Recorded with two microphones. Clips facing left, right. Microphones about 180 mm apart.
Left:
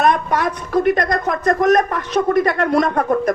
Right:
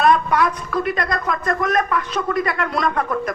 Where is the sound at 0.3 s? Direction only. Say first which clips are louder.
Even; 45° left (ahead or behind).